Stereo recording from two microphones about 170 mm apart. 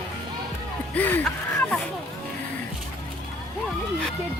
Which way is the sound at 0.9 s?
10° left (ahead or behind).